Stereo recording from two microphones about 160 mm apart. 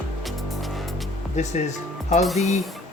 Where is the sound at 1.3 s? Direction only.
45° left (ahead or behind).